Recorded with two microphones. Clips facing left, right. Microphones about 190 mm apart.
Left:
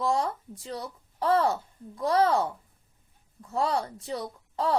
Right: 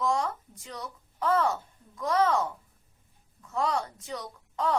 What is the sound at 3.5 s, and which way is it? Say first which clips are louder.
A woman's voice: left 2 dB; 35° left (ahead or behind).